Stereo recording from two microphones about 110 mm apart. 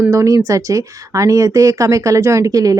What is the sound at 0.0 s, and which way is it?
Speech, 25° right (ahead or behind).